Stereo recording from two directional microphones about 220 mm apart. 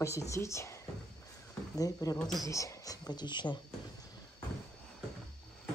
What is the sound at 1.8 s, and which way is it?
Speech, 15° left (ahead or behind).